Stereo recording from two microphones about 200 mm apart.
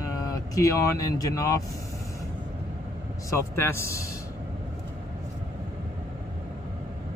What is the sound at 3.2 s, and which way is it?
Speech, 15° left (ahead or behind).